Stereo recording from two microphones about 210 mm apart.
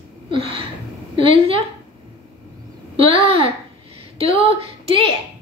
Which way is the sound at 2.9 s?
25° right (ahead or behind).